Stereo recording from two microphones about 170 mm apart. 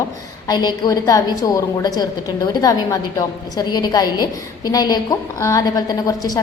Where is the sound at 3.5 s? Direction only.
25° left (ahead or behind).